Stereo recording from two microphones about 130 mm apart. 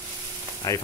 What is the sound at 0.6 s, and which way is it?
Speech, 30° left (ahead or behind).